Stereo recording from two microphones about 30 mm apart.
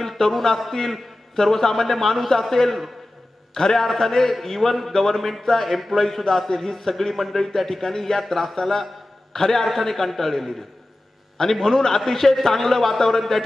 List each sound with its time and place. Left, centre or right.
0.2 s a man's voice: centre
3.5 s a man's voice: centre
3.8 s a man's voice: centre
5.7 s speech: centre
5.9 s a man's voice: centre
11.6 s a man's voice: centre